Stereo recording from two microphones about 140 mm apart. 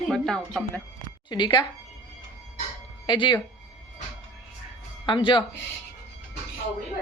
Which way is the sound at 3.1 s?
35° left (ahead or behind).